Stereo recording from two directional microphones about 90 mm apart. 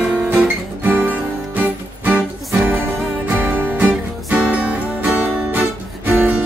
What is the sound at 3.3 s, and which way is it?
Music, 20° right (ahead or behind).